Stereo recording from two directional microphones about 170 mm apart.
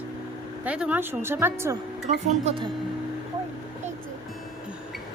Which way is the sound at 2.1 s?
45° right (ahead or behind).